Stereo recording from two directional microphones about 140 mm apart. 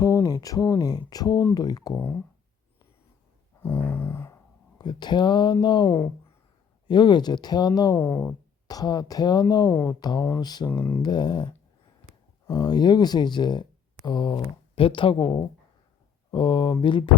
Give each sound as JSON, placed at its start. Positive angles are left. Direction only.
{"t": 0.0, "sound": "speech", "side_deg": 25}
{"t": 2.0, "sound": "speech", "side_deg": 15}
{"t": 3.6, "sound": "a sound", "side_deg": 15}
{"t": 4.8, "sound": "speech", "side_deg": 30}
{"t": 7.9, "sound": "speech", "side_deg": 15}
{"t": 8.6, "sound": "speech", "side_deg": 30}
{"t": 10.7, "sound": "speech", "side_deg": 15}
{"t": 11.0, "sound": "speech", "side_deg": 30}